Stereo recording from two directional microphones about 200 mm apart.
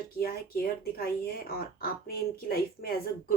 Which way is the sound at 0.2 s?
50° left (ahead or behind).